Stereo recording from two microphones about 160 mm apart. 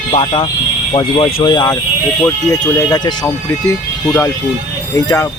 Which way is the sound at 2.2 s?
15° left (ahead or behind).